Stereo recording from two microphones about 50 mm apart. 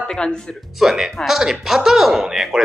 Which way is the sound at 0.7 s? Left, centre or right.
Centre.